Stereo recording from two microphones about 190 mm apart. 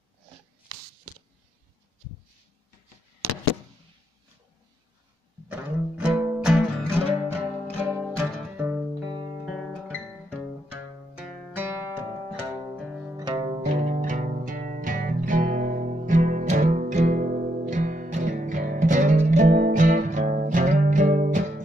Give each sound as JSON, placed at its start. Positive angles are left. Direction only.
{"t": 5.5, "sound": "music", "side_deg": -5}
{"t": 10.7, "sound": "music", "side_deg": -10}
{"t": 13.2, "sound": "music", "side_deg": -25}
{"t": 13.7, "sound": "music", "side_deg": -40}